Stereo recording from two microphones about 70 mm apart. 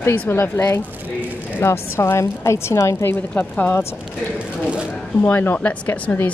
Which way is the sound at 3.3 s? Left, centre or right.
Left.